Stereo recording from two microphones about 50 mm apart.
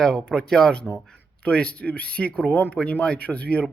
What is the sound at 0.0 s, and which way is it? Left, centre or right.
Speech, centre.